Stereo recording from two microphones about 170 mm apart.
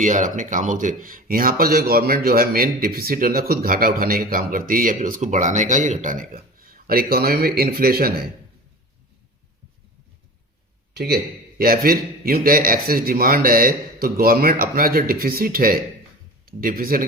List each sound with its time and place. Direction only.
0.0 s speech: 50° right (ahead or behind); by 8.3 s 65° right (ahead or behind)
10.9 s speech: 65° right (ahead or behind)